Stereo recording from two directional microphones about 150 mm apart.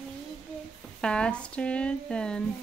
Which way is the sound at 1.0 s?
5° left (ahead or behind).